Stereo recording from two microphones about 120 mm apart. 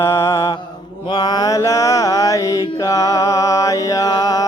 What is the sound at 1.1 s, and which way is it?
Mantra, 35° left (ahead or behind).